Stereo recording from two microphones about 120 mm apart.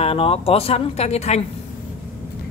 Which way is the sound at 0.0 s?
50° left (ahead or behind).